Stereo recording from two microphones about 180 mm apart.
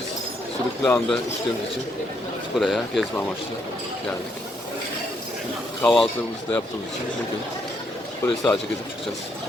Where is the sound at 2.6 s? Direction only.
Centre (ahead or behind).